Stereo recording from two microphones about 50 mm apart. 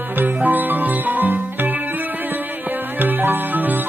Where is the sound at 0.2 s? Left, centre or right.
Right.